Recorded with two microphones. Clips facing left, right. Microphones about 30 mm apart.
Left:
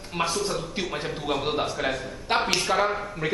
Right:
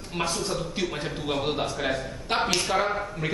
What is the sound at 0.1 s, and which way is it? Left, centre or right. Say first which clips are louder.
A man's voice: left 2 dB; centre.